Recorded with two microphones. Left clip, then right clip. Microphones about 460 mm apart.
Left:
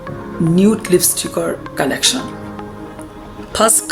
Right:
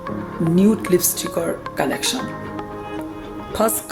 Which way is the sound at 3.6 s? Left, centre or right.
Right.